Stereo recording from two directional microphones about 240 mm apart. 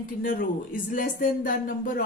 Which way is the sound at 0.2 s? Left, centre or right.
Left.